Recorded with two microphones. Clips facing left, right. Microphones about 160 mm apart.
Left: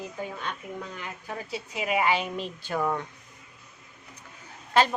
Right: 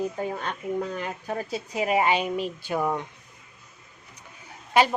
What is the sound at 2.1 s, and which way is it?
Speech, 15° right (ahead or behind).